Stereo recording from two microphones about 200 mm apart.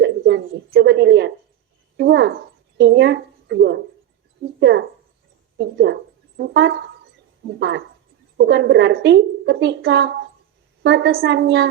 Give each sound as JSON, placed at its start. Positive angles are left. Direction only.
{"t": 0.0, "sound": "speech", "side_deg": -65}
{"t": 5.5, "sound": "a woman's voice", "side_deg": -60}